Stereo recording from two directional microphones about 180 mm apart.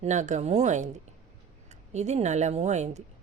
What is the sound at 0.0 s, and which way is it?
Speech, 40° right (ahead or behind).